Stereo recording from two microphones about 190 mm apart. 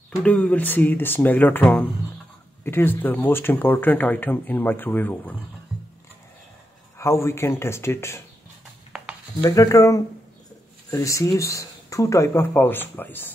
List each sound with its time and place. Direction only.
0.1 s speech: 5° left (ahead or behind)
5.7 s a sound: 5° right (ahead or behind)
7.0 s speech: 15° left (ahead or behind)
9.4 s speech: 20° left (ahead or behind)